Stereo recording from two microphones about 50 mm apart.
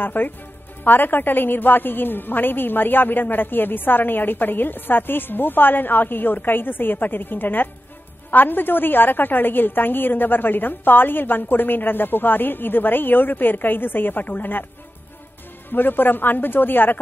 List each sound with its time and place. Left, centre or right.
0.0 s a woman's voice: left
15.7 s speech: left